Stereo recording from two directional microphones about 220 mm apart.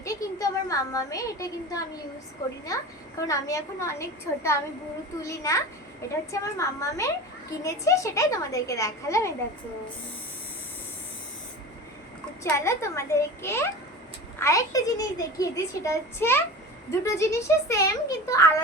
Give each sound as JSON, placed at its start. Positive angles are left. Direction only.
{"t": 0.0, "sound": "a woman's voice", "side_deg": 15}
{"t": 12.4, "sound": "a child's voice", "side_deg": 10}